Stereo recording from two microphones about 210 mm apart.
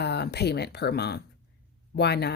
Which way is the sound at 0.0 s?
50° left (ahead or behind).